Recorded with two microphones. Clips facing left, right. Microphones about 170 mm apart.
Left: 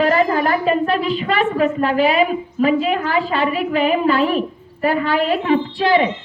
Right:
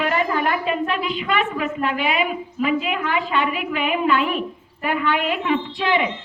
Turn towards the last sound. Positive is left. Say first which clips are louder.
# left 5 dB
turn(degrees=35)  # may be behind; listen again after turning